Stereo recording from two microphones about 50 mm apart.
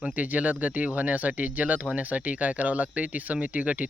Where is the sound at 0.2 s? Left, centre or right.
Right.